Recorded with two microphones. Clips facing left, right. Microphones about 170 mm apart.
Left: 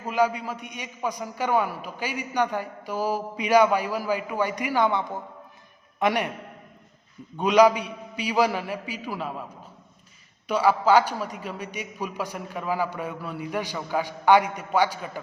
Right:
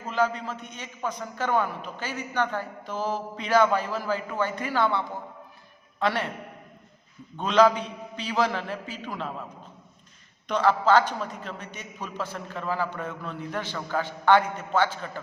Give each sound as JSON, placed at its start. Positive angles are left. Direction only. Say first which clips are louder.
{"t": 0.0, "sound": "a man's voice", "louder": "left 2 dB", "side_deg": 10}
{"t": 7.3, "sound": "a man's voice", "louder": "left 2 dB", "side_deg": 10}
{"t": 10.5, "sound": "a man's voice", "louder": "left 1 dB", "side_deg": 10}